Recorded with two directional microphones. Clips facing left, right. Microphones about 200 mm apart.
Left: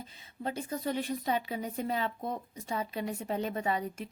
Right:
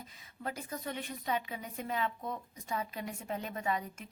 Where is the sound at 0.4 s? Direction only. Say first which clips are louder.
Left 6 dB; 30° left (ahead or behind).